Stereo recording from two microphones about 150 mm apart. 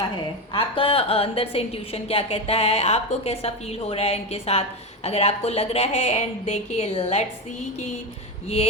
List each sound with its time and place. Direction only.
0.5 s a woman's voice: 35° left (ahead or behind)